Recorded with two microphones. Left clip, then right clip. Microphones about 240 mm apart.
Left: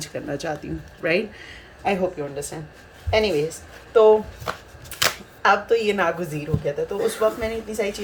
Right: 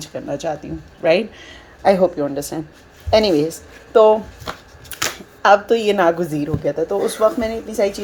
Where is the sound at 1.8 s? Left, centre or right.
Right.